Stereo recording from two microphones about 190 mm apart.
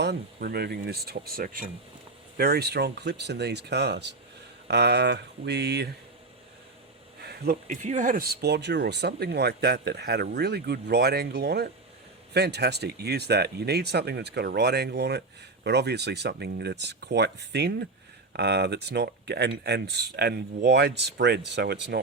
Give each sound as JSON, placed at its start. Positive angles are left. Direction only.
{"t": 0.0, "sound": "speech", "side_deg": -55}
{"t": 7.2, "sound": "speech", "side_deg": -55}